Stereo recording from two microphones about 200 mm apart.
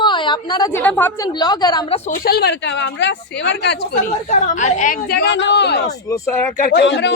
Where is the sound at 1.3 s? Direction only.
20° left (ahead or behind).